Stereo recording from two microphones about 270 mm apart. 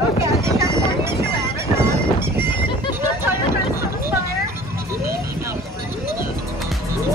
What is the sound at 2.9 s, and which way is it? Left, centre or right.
Vehicle, centre.